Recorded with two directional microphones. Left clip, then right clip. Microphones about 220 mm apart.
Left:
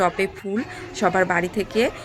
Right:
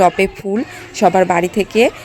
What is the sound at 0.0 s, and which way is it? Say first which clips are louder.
Speech: right 9 dB; 30° right (ahead or behind).